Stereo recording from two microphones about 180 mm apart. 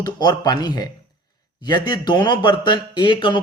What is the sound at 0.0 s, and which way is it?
Speech, 20° left (ahead or behind).